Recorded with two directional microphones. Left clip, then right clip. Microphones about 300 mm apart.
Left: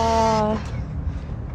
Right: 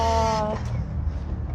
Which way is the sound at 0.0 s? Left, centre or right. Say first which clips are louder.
Left 3 dB; right.